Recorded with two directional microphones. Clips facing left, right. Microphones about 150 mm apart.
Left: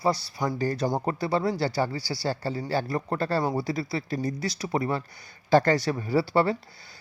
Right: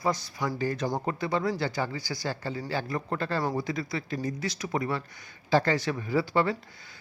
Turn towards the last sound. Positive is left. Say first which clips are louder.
# left 3 dB
turn(degrees=35)  # may be behind; listen again after turning